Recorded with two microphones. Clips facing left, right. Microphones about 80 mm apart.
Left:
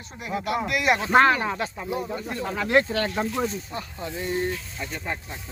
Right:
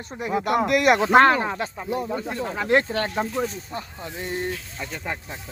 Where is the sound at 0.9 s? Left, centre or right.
Right.